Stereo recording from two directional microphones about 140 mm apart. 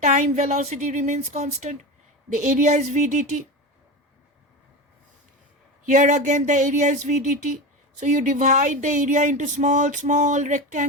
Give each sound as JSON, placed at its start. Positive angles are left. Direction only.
{"t": 0.0, "sound": "speech", "side_deg": -55}
{"t": 5.9, "sound": "speech", "side_deg": -60}